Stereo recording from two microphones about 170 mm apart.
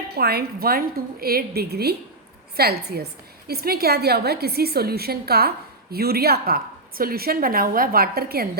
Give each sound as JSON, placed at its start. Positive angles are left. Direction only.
{"t": 0.1, "sound": "a woman's voice", "side_deg": -70}